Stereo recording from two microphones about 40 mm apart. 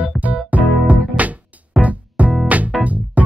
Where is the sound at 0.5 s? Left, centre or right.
Right.